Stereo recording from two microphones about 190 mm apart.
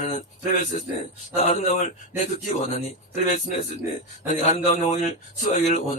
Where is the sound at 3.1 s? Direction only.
45° left (ahead or behind).